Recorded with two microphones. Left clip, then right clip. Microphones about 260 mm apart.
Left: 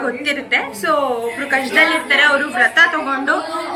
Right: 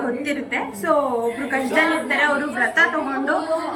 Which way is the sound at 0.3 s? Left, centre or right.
Centre.